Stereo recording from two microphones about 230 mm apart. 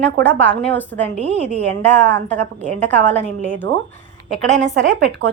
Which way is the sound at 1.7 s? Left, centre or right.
Centre.